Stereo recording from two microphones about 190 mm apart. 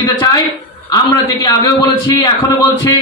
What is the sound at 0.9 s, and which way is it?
A man's voice, 20° left (ahead or behind).